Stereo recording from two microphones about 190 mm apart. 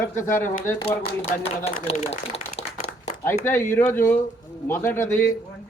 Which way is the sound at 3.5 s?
15° left (ahead or behind).